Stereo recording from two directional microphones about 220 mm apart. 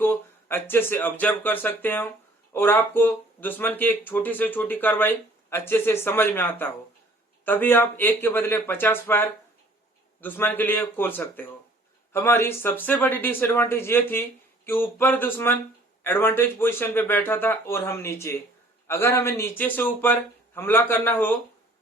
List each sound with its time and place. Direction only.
0.0 s speech: 10° left (ahead or behind)